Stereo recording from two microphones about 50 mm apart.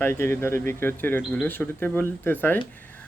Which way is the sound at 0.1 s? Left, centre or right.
Left.